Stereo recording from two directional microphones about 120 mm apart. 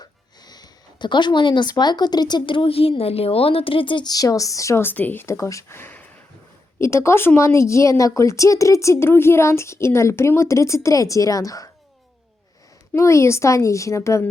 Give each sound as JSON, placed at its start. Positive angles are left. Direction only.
{"t": 0.0, "sound": "speech", "side_deg": 35}
{"t": 12.9, "sound": "speech", "side_deg": 25}